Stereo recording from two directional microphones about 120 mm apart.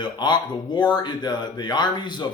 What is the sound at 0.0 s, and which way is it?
Speech, 40° left (ahead or behind).